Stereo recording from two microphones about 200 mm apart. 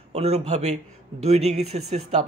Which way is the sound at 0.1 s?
30° right (ahead or behind).